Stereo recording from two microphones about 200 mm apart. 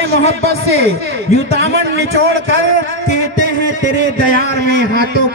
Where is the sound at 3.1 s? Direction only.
40° left (ahead or behind).